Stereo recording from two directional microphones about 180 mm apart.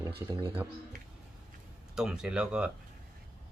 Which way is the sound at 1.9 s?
5° right (ahead or behind).